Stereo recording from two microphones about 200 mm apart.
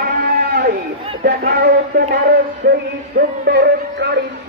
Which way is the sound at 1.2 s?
55° right (ahead or behind).